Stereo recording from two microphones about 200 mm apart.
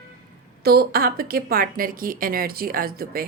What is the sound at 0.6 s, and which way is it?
A woman's voice, 50° right (ahead or behind).